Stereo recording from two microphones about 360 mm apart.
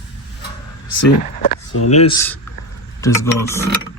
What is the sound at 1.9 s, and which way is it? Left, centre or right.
Speech, centre.